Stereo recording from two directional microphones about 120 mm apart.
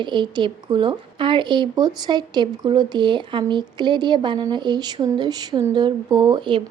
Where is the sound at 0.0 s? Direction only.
40° right (ahead or behind).